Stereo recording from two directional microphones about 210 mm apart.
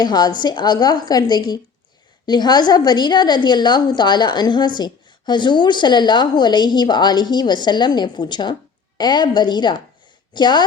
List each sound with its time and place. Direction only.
0.0 s a woman's voice: 20° left (ahead or behind)